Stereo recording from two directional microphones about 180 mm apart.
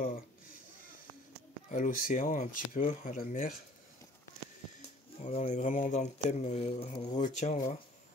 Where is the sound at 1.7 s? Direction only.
45° left (ahead or behind).